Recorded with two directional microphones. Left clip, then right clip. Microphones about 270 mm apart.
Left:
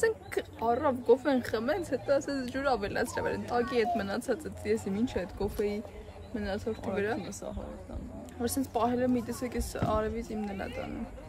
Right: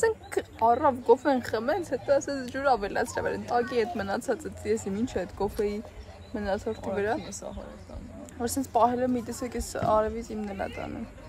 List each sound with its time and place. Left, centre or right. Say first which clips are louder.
0.0 s speech: right 3 dB; centre
7.2 s speech: right 1 dB; centre
8.4 s speech: right 6 dB; centre